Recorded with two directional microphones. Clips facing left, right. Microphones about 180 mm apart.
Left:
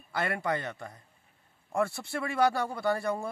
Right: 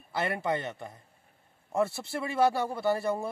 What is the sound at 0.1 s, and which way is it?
Speech, 25° right (ahead or behind).